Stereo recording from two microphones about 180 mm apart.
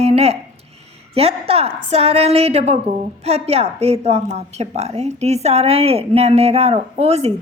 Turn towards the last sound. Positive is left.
turn(degrees=-35)  # may be behind; listen again after turning